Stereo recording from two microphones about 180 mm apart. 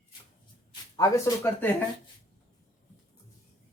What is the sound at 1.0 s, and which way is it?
Speech, 15° left (ahead or behind).